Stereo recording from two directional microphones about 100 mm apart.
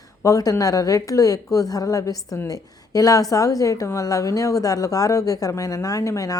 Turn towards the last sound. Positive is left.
turn(degrees=35)  # may be behind; listen again after turning